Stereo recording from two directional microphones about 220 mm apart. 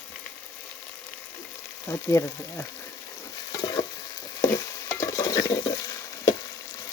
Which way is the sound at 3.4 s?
20° left (ahead or behind).